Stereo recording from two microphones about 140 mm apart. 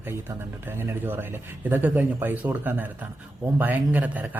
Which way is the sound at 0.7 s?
15° right (ahead or behind).